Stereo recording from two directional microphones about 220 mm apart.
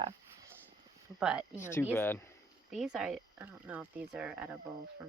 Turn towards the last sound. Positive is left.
turn(degrees=-5)  # may be behind; listen again after turning